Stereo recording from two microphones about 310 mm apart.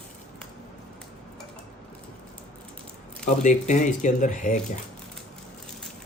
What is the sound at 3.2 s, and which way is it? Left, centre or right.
Speech, left.